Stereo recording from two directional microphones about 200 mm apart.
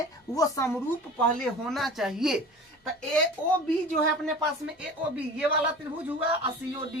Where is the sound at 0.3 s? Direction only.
15° left (ahead or behind).